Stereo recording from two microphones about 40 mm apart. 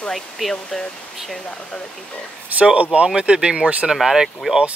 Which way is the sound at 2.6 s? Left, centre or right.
Right.